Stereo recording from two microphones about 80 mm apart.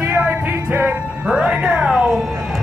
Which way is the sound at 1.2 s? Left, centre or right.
Centre.